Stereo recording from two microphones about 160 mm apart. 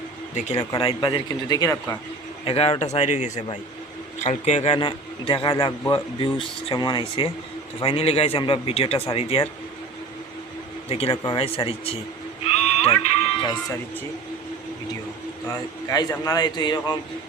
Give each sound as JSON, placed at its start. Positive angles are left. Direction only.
{"t": 0.3, "sound": "speech", "side_deg": 45}
{"t": 0.8, "sound": "a man's voice", "side_deg": 35}
{"t": 2.5, "sound": "a man's voice", "side_deg": 40}
{"t": 10.8, "sound": "a man's voice", "side_deg": 35}
{"t": 12.7, "sound": "music", "side_deg": 40}
{"t": 13.4, "sound": "a man's voice", "side_deg": 25}
{"t": 15.9, "sound": "a man's voice", "side_deg": 25}